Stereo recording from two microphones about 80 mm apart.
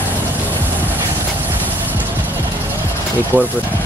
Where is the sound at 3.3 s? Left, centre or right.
Right.